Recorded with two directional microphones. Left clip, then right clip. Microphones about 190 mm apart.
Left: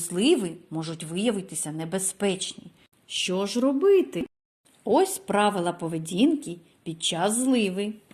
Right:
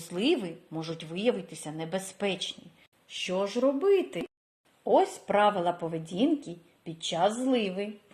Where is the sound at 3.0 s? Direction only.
40° left (ahead or behind).